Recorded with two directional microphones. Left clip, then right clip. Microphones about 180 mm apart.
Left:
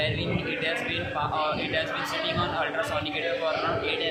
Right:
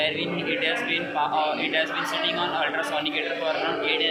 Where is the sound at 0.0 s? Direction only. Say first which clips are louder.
Right 3 dB; 20° left (ahead or behind).